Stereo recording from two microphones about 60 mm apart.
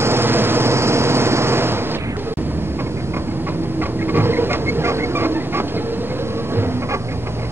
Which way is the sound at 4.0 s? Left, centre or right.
Right.